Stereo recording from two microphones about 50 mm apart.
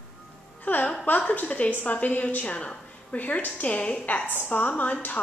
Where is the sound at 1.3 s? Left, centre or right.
Left.